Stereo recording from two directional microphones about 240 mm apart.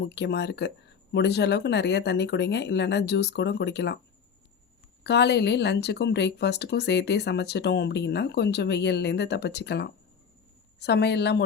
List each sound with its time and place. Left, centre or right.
0.0 s speech: left
5.0 s speech: left